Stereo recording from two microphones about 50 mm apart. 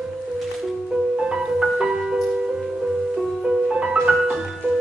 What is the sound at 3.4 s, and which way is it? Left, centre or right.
Music, centre.